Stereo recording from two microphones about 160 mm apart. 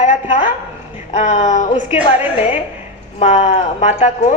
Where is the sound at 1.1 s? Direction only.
45° left (ahead or behind).